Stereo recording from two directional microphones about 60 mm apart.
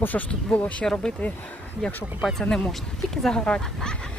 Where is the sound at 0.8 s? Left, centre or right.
Centre.